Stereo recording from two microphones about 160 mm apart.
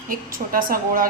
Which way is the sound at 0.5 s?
60° right (ahead or behind).